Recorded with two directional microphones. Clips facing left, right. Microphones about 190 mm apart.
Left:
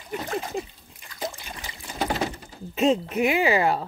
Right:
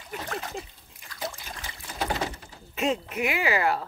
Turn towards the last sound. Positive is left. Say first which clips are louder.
# left 4 dB
turn(degrees=25)  # may be behind; listen again after turning